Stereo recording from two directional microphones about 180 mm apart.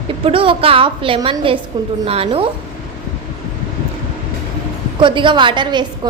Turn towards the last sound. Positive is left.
turn(degrees=-25)  # may be behind; listen again after turning